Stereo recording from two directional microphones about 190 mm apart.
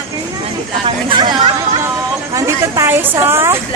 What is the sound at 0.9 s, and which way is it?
Speech, 25° right (ahead or behind).